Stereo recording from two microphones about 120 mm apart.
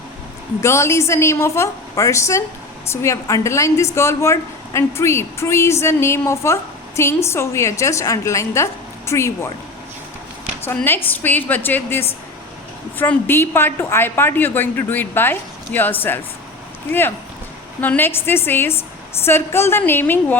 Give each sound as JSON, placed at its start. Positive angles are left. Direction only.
{"t": 0.6, "sound": "a woman's voice", "side_deg": 25}
{"t": 10.8, "sound": "a woman's voice", "side_deg": 15}
{"t": 17.7, "sound": "a woman's voice", "side_deg": 15}